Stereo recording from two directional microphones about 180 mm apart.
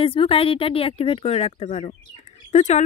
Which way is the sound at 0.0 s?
30° left (ahead or behind).